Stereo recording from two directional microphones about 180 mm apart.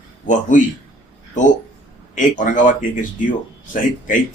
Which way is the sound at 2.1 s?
45° left (ahead or behind).